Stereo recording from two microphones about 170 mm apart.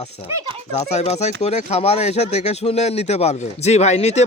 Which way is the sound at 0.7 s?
40° left (ahead or behind).